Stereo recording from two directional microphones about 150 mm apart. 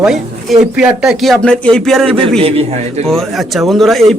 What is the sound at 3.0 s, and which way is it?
Speech, centre (ahead or behind).